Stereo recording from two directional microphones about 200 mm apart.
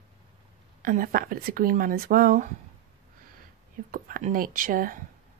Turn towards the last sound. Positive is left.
turn(degrees=-45)  # may be behind; listen again after turning